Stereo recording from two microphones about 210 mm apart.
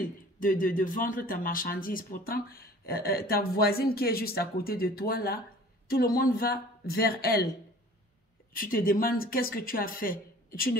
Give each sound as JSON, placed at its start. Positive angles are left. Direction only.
{"t": 0.0, "sound": "speech", "side_deg": 40}
{"t": 8.5, "sound": "speech", "side_deg": 40}